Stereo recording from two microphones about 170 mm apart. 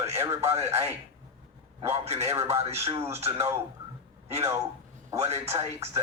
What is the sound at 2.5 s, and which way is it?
Speech, 40° right (ahead or behind).